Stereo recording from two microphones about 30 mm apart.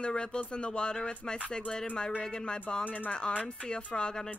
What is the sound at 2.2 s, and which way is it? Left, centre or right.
Speech, left.